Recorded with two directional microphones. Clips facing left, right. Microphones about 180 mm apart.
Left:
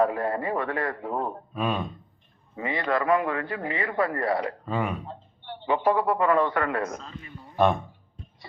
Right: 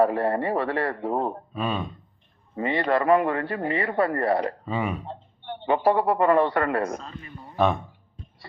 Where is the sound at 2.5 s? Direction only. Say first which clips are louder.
Right 3 dB; 35° right (ahead or behind).